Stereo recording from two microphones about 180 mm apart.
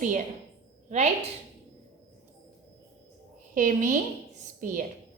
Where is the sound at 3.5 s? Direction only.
45° right (ahead or behind).